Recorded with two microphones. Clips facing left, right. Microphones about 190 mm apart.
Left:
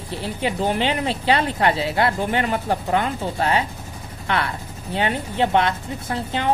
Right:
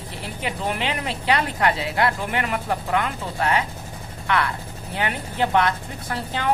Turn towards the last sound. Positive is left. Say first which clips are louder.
# left 3 dB
turn(degrees=25)  # may be behind; listen again after turning